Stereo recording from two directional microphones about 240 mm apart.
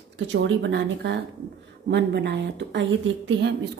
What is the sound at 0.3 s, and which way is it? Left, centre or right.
A woman's voice, right.